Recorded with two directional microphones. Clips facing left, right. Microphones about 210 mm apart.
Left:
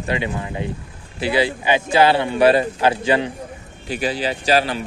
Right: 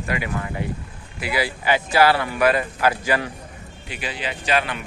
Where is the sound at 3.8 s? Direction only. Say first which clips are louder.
Left 8 dB; 40° left (ahead or behind).